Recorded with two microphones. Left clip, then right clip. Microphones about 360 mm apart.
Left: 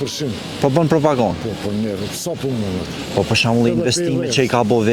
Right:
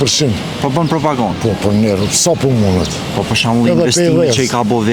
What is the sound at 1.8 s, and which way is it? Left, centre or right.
Speech, right.